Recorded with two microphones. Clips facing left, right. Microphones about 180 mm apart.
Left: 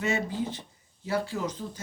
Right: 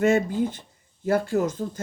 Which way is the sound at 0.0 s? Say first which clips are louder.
Right 8 dB; 50° right (ahead or behind).